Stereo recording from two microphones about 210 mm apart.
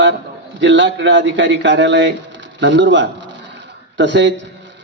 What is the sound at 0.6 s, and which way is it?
A man's voice, 55° right (ahead or behind).